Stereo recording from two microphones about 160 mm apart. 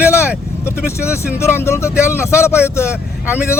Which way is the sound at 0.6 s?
15° left (ahead or behind).